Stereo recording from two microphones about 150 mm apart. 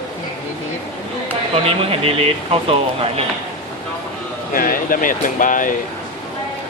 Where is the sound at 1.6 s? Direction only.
40° right (ahead or behind).